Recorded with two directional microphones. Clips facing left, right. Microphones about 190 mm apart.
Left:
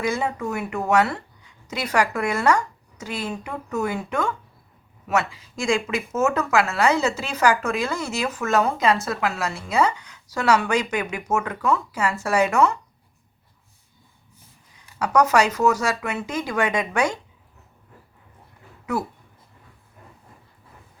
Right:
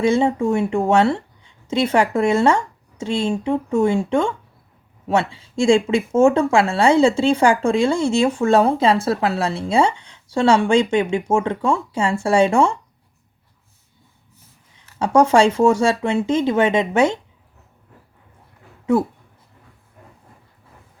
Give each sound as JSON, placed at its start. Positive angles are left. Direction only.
{"t": 0.0, "sound": "speech", "side_deg": -25}
{"t": 14.9, "sound": "speech", "side_deg": -25}
{"t": 18.9, "sound": "speech", "side_deg": -25}